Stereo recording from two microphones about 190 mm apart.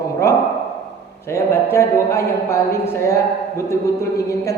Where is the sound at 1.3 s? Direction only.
15° left (ahead or behind).